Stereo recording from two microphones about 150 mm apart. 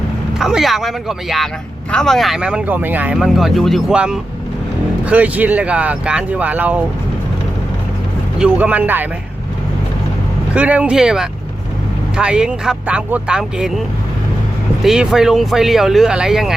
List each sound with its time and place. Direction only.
0.3 s speech: centre (ahead or behind)
8.4 s speech: 10° right (ahead or behind)
10.5 s speech: 10° right (ahead or behind)
14.8 s speech: 5° right (ahead or behind)